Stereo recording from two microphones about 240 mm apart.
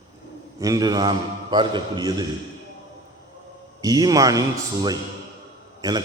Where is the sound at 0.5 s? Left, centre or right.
Centre.